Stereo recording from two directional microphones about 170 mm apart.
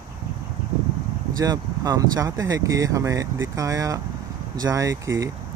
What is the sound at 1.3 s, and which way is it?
Speech, 20° right (ahead or behind).